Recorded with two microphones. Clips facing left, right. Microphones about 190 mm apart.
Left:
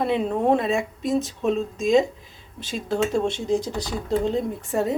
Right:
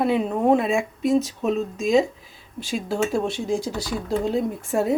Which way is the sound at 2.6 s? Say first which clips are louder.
Even; 10° right (ahead or behind).